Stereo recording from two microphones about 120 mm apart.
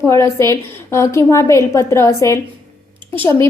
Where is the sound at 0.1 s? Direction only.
25° left (ahead or behind).